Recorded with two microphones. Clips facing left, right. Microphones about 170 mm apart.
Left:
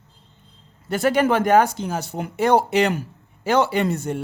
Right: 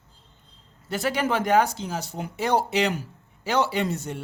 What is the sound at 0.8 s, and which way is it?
Speech, 55° left (ahead or behind).